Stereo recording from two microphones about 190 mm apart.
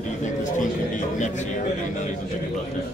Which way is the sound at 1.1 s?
40° left (ahead or behind).